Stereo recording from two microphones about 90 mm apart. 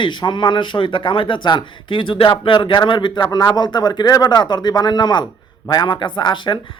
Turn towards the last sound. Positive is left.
turn(degrees=60)  # may be behind; listen again after turning